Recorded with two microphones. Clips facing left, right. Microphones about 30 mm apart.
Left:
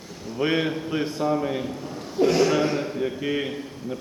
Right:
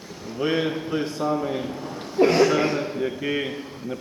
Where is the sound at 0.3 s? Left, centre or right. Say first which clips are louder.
Even; centre.